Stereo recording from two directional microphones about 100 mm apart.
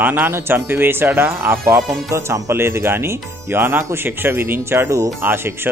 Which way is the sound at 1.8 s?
Centre (ahead or behind).